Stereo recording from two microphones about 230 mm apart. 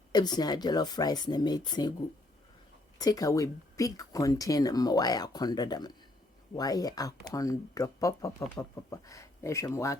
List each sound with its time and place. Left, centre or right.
0.1 s speech: centre
3.0 s speech: centre